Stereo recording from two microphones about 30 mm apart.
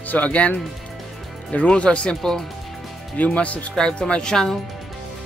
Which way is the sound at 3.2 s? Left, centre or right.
Left.